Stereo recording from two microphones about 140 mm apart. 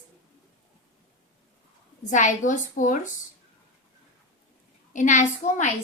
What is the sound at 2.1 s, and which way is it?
A woman's voice, 65° left (ahead or behind).